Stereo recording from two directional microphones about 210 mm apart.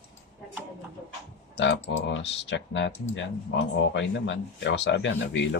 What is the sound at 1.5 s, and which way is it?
Typing, 55° left (ahead or behind).